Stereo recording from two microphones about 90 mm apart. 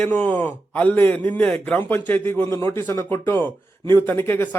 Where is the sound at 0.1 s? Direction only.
20° left (ahead or behind).